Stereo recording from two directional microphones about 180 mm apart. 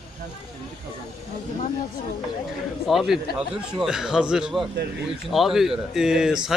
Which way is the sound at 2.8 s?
Centre (ahead or behind).